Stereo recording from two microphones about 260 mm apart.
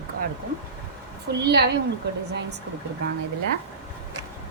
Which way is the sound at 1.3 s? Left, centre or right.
Right.